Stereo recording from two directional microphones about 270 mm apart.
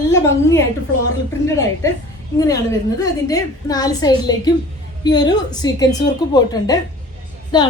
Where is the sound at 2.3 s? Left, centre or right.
Centre.